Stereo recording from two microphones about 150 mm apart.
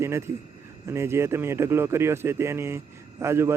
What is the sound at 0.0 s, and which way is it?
A man's voice, 15° right (ahead or behind).